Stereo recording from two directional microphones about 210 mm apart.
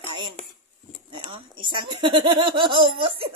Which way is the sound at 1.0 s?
25° right (ahead or behind).